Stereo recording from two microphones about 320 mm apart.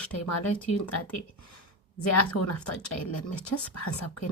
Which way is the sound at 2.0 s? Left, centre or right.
Left.